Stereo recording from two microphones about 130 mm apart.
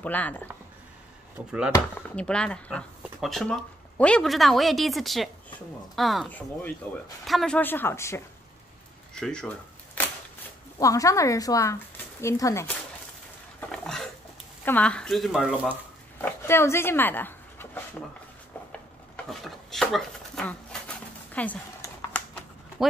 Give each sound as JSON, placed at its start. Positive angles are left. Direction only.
{"t": 0.0, "sound": "speech", "side_deg": 10}
{"t": 2.0, "sound": "speech", "side_deg": 10}
{"t": 6.2, "sound": "speech", "side_deg": 10}
{"t": 9.1, "sound": "speech", "side_deg": 5}
{"t": 10.0, "sound": "a sound", "side_deg": 15}
{"t": 10.8, "sound": "speech", "side_deg": 25}
{"t": 13.6, "sound": "a sound", "side_deg": 5}
{"t": 14.6, "sound": "speech", "side_deg": 10}
{"t": 16.2, "sound": "speech", "side_deg": 20}
{"t": 18.7, "sound": "chopping", "side_deg": 5}
{"t": 21.3, "sound": "a sound", "side_deg": 10}
{"t": 22.8, "sound": "speech", "side_deg": 0}